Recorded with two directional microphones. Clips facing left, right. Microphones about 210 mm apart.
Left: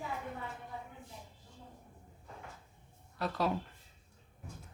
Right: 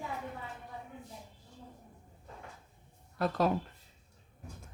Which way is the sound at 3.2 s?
45° right (ahead or behind).